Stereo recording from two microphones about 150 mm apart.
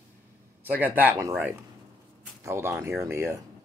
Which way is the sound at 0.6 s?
10° right (ahead or behind).